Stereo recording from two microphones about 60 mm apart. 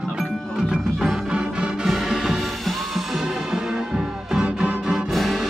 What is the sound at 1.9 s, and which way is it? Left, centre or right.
Music, centre.